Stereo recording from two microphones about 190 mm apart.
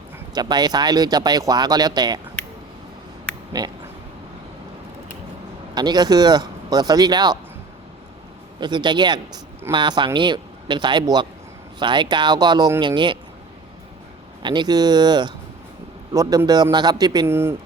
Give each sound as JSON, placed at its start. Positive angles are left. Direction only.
{"t": 0.3, "sound": "speech", "side_deg": -20}
{"t": 3.6, "sound": "speech", "side_deg": -20}
{"t": 5.7, "sound": "speech", "side_deg": -20}
{"t": 8.6, "sound": "speech", "side_deg": -25}
{"t": 14.4, "sound": "speech", "side_deg": -25}